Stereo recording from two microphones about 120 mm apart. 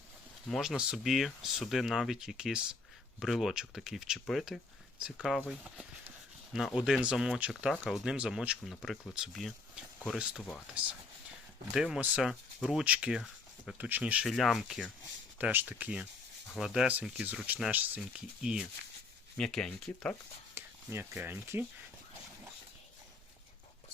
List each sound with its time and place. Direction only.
0.4 s speech: centre (ahead or behind)
11.7 s speech: 5° right (ahead or behind)
12.8 s speech: 10° right (ahead or behind)
15.4 s speech: 15° right (ahead or behind)
19.4 s speech: 5° left (ahead or behind)
20.6 s speech: 15° right (ahead or behind)